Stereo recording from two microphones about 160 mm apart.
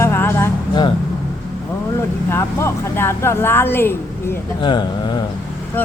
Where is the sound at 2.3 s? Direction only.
15° left (ahead or behind).